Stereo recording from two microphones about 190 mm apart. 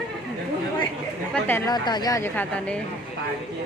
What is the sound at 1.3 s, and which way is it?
Speech, 10° left (ahead or behind).